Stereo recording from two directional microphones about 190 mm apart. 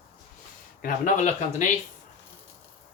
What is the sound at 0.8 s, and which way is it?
Speech, 40° left (ahead or behind).